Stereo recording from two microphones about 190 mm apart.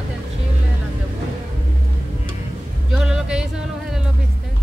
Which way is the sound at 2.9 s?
5° right (ahead or behind).